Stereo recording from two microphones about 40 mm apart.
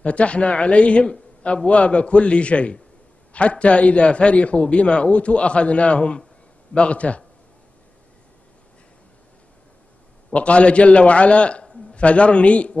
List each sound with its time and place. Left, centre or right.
0.0 s a man's voice: left
10.3 s a man's voice: left